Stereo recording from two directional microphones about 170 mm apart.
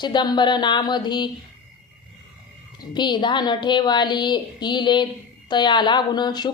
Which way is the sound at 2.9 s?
25° left (ahead or behind).